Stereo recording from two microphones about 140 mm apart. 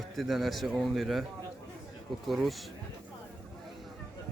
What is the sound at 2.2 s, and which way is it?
Speech, centre (ahead or behind).